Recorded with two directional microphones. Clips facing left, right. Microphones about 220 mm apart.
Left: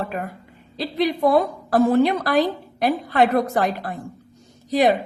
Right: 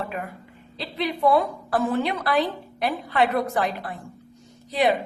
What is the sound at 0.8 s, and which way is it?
A woman's voice, 40° left (ahead or behind).